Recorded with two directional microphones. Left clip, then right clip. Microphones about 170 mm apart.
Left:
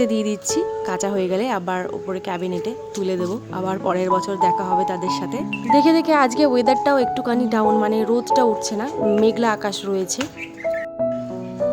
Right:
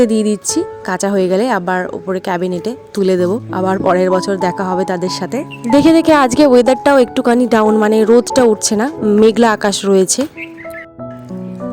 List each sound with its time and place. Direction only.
0.0 s speech: 35° right (ahead or behind)
5.7 s a woman's voice: 45° right (ahead or behind)